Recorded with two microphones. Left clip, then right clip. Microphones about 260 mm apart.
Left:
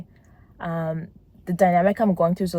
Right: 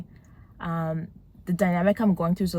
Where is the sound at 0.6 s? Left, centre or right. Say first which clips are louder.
Left 3 dB; left.